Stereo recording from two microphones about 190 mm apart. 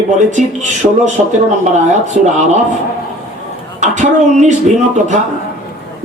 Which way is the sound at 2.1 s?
40° right (ahead or behind).